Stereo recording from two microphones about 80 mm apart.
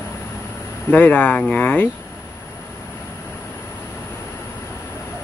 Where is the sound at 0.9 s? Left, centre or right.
Centre.